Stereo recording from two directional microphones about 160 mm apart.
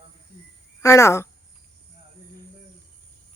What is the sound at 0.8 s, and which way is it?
Speech, 20° left (ahead or behind).